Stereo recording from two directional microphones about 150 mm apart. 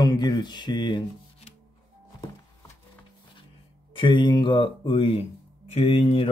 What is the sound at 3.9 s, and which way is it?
Speech, 30° left (ahead or behind).